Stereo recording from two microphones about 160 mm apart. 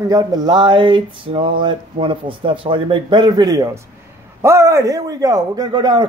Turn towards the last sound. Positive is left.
turn(degrees=-25)  # may be behind; listen again after turning